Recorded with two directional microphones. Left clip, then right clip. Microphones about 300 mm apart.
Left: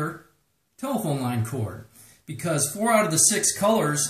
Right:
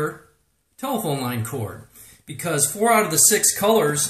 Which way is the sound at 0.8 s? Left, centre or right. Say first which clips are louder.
Right 3 dB; centre.